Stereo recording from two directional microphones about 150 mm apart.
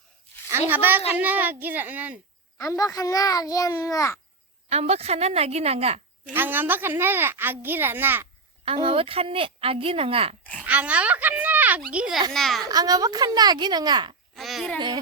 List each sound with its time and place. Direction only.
0.7 s a child's voice: 10° right (ahead or behind)
2.6 s a child's voice: 20° left (ahead or behind)
4.7 s a woman's voice: 45° right (ahead or behind)
6.3 s a child's voice: 15° right (ahead or behind)
8.6 s speech: 40° right (ahead or behind)
10.6 s a child's voice: 10° right (ahead or behind)
12.6 s speech: 25° right (ahead or behind)
14.3 s a child's voice: centre (ahead or behind)